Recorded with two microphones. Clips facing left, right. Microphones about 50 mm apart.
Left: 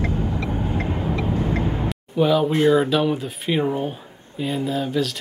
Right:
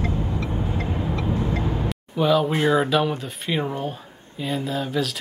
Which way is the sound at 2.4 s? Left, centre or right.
Centre.